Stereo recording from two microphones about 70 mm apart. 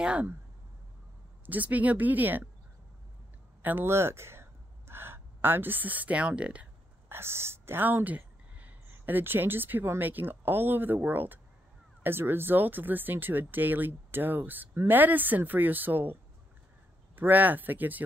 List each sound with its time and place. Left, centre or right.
0.0 s speech: centre
1.4 s speech: right
3.6 s speech: right
7.1 s speech: right